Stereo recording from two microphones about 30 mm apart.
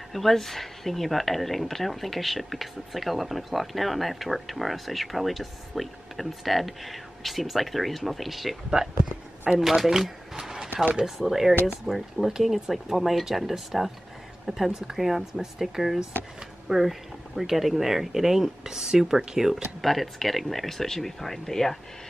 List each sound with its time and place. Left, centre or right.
0.1 s speech: centre
8.8 s speech: right
9.5 s speech: centre
11.9 s speech: right
12.4 s speech: centre
19.8 s speech: centre